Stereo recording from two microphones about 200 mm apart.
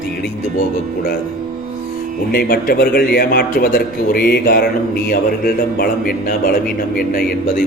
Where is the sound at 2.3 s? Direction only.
50° left (ahead or behind).